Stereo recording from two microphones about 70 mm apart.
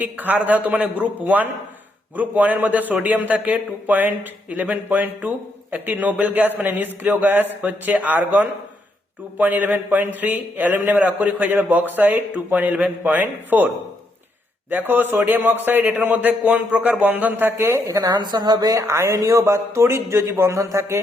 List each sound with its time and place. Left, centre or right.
0.0 s a man's voice: right
14.7 s a man's voice: right
17.6 s a man's voice: right
18.0 s speech: right
18.9 s a man's voice: right